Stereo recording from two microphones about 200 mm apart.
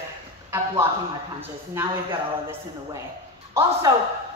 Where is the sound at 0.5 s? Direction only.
10° right (ahead or behind).